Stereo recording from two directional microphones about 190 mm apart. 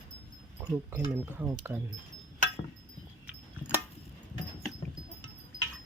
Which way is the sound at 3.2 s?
10° right (ahead or behind).